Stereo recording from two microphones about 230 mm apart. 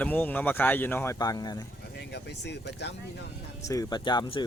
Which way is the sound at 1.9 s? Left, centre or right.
Left.